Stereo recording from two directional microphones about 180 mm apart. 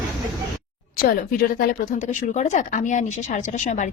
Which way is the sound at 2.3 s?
40° left (ahead or behind).